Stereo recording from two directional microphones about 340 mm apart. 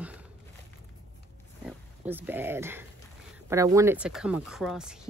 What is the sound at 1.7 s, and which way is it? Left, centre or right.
Speech, centre.